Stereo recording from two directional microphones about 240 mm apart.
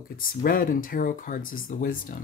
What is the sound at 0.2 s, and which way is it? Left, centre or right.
Speech, left.